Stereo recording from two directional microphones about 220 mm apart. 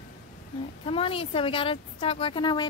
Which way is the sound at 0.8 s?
25° left (ahead or behind).